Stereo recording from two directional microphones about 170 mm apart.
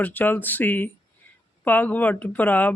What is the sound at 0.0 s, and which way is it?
Speech, 10° left (ahead or behind).